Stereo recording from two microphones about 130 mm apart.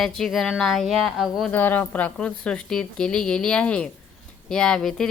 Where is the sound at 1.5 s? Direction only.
15° left (ahead or behind).